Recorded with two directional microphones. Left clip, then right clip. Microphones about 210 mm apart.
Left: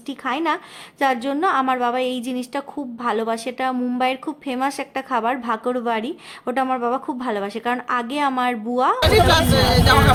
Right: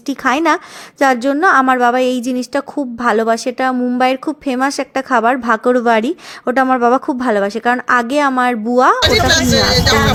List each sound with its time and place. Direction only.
0.1 s a woman's voice: 35° right (ahead or behind)
9.0 s speech: 20° left (ahead or behind)